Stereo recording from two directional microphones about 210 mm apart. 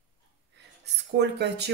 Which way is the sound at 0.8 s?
55° right (ahead or behind).